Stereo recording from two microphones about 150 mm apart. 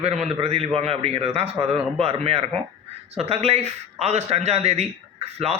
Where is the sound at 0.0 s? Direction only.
45° right (ahead or behind).